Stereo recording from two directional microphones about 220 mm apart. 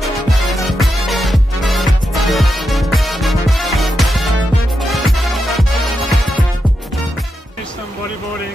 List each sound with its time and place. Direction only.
0.0 s music: centre (ahead or behind)